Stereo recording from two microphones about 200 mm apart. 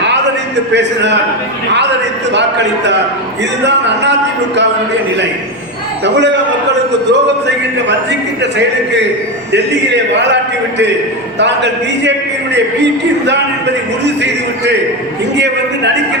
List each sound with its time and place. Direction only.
0.7 s speech: 60° right (ahead or behind)
7.1 s speech: 60° right (ahead or behind)
11.3 s speech: 60° right (ahead or behind)